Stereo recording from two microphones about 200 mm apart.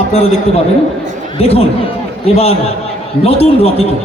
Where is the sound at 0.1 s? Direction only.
30° left (ahead or behind).